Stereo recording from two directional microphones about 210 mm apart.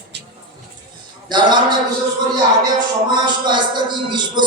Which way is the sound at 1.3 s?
20° right (ahead or behind).